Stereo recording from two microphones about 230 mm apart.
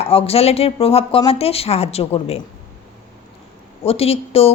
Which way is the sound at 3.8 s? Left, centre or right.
Left.